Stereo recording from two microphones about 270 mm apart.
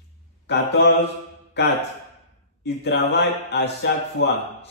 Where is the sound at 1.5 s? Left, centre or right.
Left.